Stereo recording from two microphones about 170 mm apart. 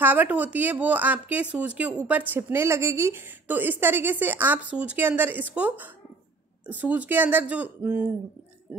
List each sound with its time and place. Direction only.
0.0 s a woman's voice: 10° right (ahead or behind)